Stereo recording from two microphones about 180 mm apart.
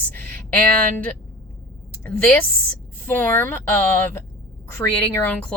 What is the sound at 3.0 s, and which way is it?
Speech, 10° left (ahead or behind).